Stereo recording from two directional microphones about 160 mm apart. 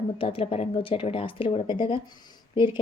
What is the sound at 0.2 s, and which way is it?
A woman's voice, 35° left (ahead or behind).